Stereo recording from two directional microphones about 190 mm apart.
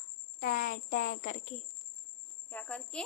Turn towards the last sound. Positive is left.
turn(degrees=5)  # may be behind; listen again after turning